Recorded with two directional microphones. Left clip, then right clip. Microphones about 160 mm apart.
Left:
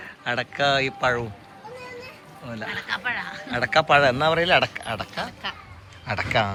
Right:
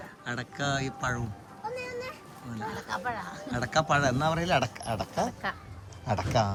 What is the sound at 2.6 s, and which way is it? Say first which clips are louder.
Speech: left 5 dB; 10° right (ahead or behind).